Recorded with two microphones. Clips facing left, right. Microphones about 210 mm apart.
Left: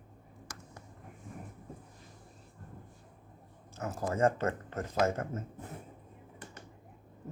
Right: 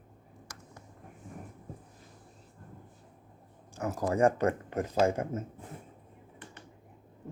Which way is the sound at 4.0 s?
15° right (ahead or behind).